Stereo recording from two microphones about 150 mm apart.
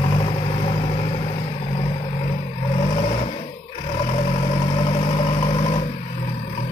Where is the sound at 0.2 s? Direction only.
40° left (ahead or behind).